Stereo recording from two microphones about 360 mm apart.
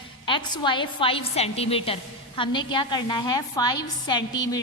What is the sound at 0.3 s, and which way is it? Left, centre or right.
A woman's voice, centre.